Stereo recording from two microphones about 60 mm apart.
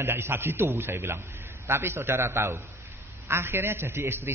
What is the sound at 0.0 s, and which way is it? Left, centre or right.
A man's voice, right.